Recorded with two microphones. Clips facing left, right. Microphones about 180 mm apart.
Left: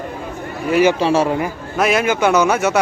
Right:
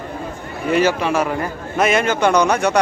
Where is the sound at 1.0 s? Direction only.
30° left (ahead or behind).